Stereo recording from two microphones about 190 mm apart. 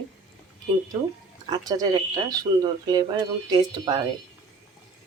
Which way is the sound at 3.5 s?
20° right (ahead or behind).